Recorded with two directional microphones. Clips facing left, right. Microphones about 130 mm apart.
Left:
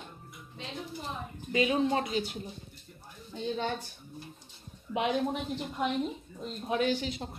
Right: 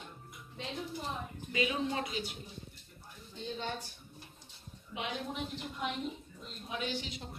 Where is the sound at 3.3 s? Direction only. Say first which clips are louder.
Left 7 dB; 75° left (ahead or behind).